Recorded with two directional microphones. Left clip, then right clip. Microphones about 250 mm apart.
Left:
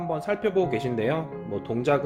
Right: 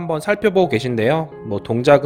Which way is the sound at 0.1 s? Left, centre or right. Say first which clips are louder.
Right 9 dB; right.